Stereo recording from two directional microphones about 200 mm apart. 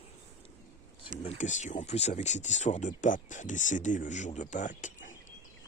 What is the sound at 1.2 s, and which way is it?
Speech, 35° left (ahead or behind).